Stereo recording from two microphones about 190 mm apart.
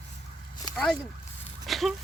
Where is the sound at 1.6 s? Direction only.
Centre (ahead or behind).